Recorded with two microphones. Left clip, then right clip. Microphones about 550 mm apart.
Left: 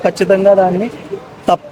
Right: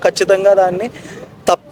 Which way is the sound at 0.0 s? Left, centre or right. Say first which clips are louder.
Left 1 dB; right.